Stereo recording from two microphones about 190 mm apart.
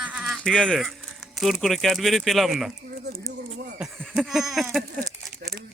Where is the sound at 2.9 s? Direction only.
55° right (ahead or behind).